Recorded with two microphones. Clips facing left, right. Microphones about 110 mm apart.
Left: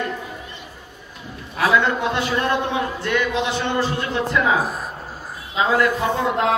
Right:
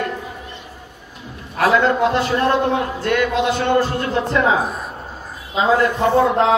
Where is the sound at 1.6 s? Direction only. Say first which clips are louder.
Right 4 dB; 40° right (ahead or behind).